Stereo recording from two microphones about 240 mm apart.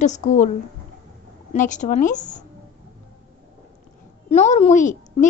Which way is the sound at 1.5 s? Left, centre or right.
Left.